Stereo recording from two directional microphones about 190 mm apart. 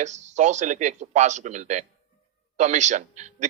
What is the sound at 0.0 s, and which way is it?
A man's voice, 40° right (ahead or behind).